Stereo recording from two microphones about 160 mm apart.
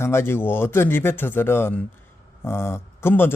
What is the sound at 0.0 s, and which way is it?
Speech, 15° left (ahead or behind).